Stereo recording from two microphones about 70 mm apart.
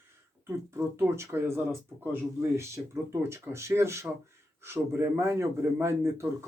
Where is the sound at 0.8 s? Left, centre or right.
Right.